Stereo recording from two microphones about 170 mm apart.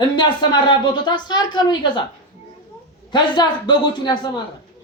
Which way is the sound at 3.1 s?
25° left (ahead or behind).